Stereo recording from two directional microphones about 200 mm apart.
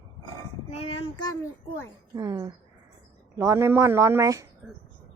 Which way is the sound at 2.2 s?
15° right (ahead or behind).